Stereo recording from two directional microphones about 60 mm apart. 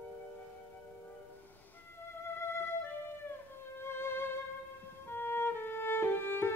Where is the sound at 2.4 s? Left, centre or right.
Left.